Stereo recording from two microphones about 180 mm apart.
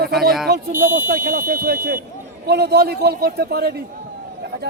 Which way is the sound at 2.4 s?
65° right (ahead or behind).